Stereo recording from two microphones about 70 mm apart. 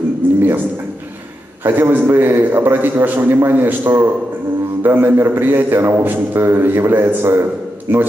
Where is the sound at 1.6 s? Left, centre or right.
Right.